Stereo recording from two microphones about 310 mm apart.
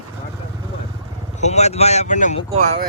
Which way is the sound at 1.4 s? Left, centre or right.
Left.